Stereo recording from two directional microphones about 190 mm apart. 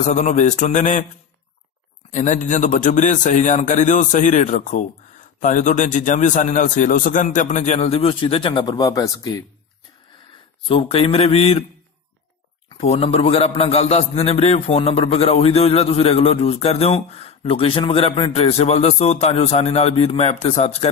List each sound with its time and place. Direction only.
0.0 s a man's voice: 40° left (ahead or behind)
2.0 s a man's voice: 40° left (ahead or behind); by 9.4 s 20° left (ahead or behind)
10.7 s a man's voice: 30° left (ahead or behind)
12.6 s a man's voice: 30° left (ahead or behind)